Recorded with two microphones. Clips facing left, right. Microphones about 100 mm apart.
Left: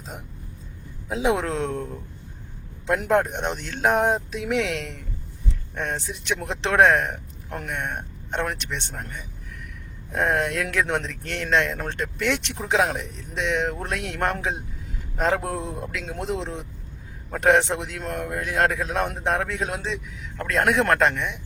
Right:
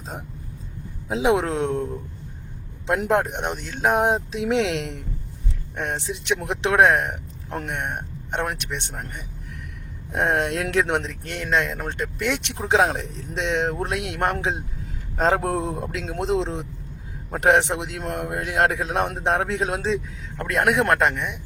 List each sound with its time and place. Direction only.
1.0 s a man's voice: 25° right (ahead or behind)
3.5 s speech: 5° right (ahead or behind)
4.0 s a man's voice: 25° right (ahead or behind)
7.5 s speech: 25° right (ahead or behind)
10.1 s a man's voice: 20° right (ahead or behind)
11.3 s speech: 5° right (ahead or behind)
12.5 s a man's voice: 30° right (ahead or behind)
20.7 s speech: 10° right (ahead or behind)